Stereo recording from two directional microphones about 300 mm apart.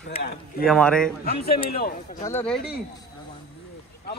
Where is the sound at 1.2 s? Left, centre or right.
Left.